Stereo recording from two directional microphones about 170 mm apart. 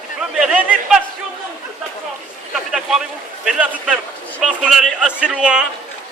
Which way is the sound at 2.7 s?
5° right (ahead or behind).